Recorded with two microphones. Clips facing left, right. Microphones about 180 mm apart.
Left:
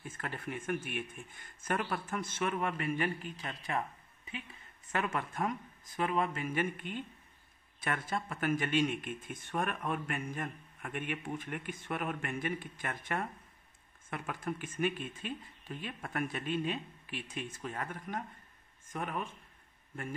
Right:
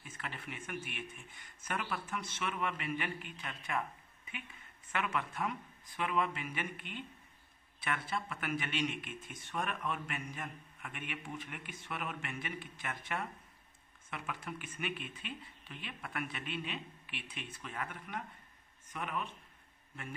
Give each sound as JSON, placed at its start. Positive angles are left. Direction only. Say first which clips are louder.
{"t": 0.1, "sound": "speech", "louder": "left 5 dB", "side_deg": 45}
{"t": 4.9, "sound": "speech", "louder": "left 2 dB", "side_deg": 40}